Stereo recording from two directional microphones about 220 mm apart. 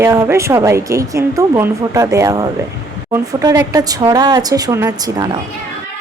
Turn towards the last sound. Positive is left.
turn(degrees=-20)  # may be behind; listen again after turning